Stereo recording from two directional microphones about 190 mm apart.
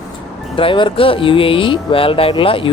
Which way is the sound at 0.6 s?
25° left (ahead or behind).